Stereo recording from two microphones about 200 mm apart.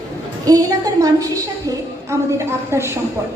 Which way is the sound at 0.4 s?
20° right (ahead or behind).